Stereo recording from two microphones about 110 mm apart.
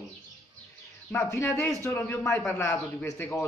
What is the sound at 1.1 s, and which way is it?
A man's voice, 25° left (ahead or behind).